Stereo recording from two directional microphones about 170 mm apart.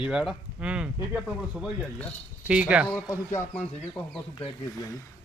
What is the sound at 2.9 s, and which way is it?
Speech, 20° left (ahead or behind).